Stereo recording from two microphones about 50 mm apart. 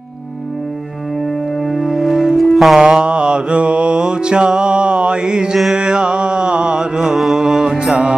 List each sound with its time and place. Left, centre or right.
1.6 s music: centre
2.8 s mantra: centre
7.2 s music: centre